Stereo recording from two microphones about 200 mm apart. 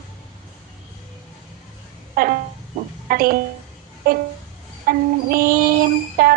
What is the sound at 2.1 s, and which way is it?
Speech, 45° right (ahead or behind).